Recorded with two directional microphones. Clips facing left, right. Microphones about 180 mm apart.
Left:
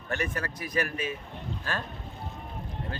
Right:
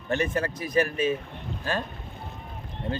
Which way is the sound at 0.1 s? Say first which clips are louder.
Right 6 dB; 25° right (ahead or behind).